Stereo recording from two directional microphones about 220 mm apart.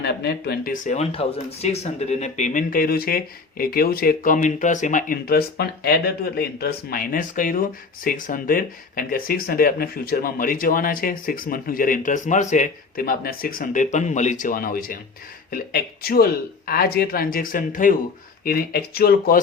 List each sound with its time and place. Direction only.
0.0 s speech: 50° left (ahead or behind)